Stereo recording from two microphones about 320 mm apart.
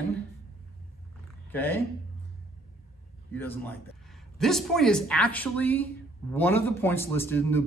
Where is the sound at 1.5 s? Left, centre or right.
Centre.